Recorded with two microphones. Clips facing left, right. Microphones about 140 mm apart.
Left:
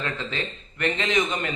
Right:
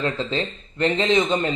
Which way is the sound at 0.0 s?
30° right (ahead or behind).